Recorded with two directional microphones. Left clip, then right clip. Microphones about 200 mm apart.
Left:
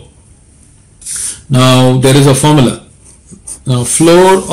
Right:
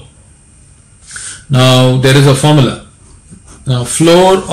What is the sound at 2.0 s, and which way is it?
Speech, 15° left (ahead or behind).